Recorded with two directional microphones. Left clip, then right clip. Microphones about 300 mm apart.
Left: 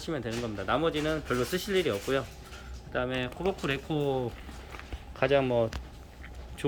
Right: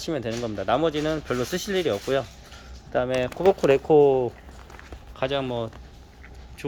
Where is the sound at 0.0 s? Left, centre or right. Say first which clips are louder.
Right 6 dB; right; by 4.2 s centre.